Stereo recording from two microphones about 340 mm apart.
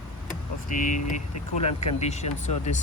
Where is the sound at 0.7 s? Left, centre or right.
Left.